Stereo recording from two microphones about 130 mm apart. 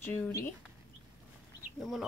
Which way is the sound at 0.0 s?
15° left (ahead or behind).